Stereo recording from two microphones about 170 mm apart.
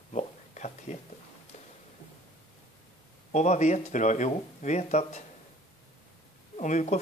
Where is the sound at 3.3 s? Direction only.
45° left (ahead or behind).